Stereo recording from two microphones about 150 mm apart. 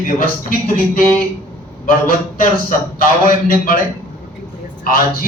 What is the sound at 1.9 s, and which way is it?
A man's voice, 65° left (ahead or behind).